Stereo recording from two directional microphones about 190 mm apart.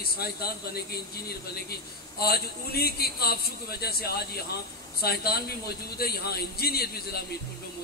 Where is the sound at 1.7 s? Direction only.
55° left (ahead or behind).